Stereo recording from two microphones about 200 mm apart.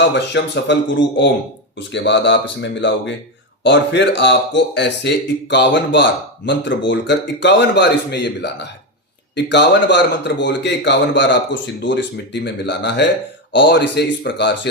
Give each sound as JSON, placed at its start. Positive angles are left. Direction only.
{"t": 0.1, "sound": "speech", "side_deg": 60}